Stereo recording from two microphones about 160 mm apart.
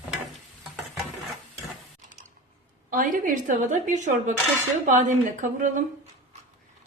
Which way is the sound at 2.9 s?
55° right (ahead or behind).